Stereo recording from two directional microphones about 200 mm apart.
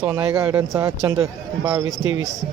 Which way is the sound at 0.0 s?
10° right (ahead or behind).